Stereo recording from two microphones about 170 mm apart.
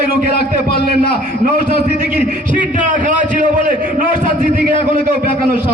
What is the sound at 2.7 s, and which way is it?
A man's voice, 50° right (ahead or behind).